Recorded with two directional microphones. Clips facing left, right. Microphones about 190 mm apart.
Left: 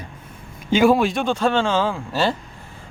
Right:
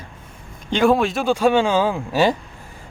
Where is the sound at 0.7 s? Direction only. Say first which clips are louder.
Left 1 dB; 5° left (ahead or behind).